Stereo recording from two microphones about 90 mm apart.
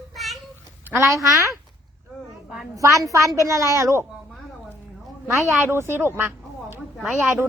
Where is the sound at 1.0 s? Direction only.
35° right (ahead or behind).